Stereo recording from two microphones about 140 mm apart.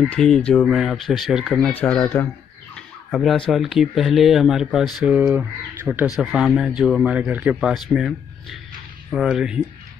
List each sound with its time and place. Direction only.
0.1 s speech: 5° left (ahead or behind)
1.7 s speech: 15° left (ahead or behind)
2.7 s speech: centre (ahead or behind)